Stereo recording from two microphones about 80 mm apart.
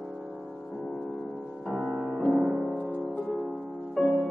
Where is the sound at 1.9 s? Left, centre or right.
Centre.